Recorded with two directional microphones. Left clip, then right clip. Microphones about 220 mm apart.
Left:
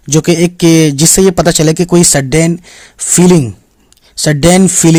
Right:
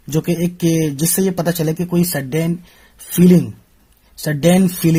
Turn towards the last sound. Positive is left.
turn(degrees=35)  # may be behind; listen again after turning